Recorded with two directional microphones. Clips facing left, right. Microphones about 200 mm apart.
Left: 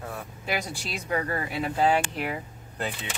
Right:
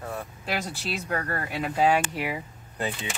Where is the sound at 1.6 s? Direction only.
10° right (ahead or behind).